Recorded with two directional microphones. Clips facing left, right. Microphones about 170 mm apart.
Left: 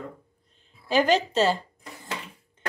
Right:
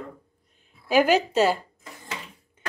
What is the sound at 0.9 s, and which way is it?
Speech, 10° right (ahead or behind).